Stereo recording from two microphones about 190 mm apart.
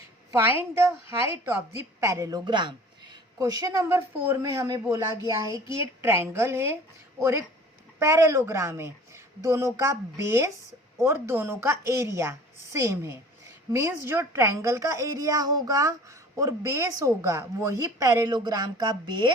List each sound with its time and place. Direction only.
0.3 s a woman's voice: 10° right (ahead or behind)